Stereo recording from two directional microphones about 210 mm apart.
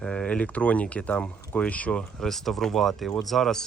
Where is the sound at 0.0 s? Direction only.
5° left (ahead or behind).